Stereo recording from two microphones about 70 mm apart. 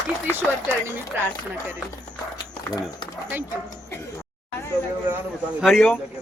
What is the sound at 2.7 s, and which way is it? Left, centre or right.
Speech, left.